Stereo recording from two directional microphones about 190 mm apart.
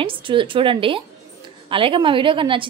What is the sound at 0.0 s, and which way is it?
A woman's voice, 25° right (ahead or behind).